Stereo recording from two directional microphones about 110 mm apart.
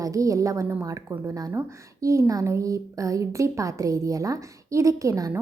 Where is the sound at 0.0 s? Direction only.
30° right (ahead or behind).